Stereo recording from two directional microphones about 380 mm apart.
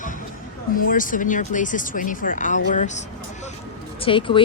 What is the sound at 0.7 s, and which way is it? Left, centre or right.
Speech, left.